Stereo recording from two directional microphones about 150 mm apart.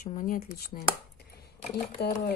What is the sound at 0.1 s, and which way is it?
Speech, 65° left (ahead or behind).